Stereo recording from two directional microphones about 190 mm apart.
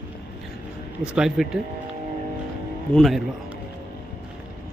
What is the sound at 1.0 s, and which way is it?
Speech, 5° right (ahead or behind).